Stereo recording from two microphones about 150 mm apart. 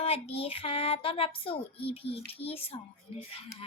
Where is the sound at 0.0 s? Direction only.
40° left (ahead or behind).